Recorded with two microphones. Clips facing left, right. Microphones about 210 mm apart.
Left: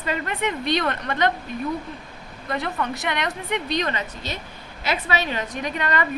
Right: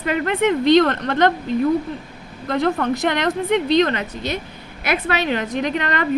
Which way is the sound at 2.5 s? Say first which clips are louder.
Right 8 dB; 50° right (ahead or behind).